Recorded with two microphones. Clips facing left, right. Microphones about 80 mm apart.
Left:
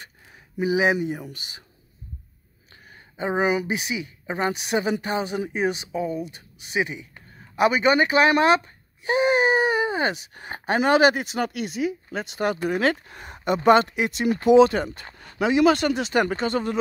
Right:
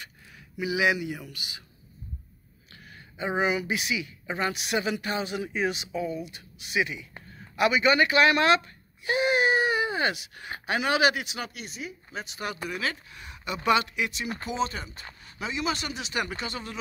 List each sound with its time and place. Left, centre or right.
0.6 s speech: left
3.2 s speech: left
14.5 s speech: left